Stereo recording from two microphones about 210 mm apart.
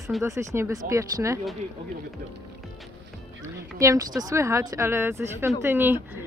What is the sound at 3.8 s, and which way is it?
Speech, 15° right (ahead or behind).